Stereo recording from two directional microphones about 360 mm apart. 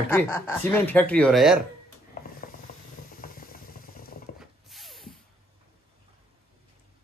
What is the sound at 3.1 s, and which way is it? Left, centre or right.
Mechanisms, left.